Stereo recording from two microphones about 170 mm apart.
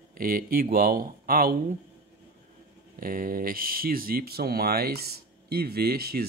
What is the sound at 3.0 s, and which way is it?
Speech, 55° right (ahead or behind).